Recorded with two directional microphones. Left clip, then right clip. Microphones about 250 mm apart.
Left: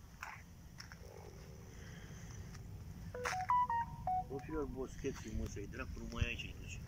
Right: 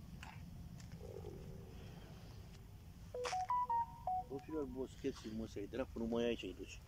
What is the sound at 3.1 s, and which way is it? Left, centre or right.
Telephone dialing, centre.